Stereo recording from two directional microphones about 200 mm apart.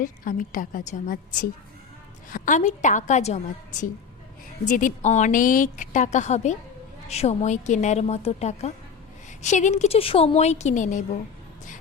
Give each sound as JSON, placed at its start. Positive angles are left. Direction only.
{"t": 0.0, "sound": "a woman's voice", "side_deg": 40}